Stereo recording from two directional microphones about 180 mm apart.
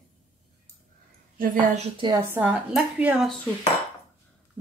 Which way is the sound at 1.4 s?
45° right (ahead or behind).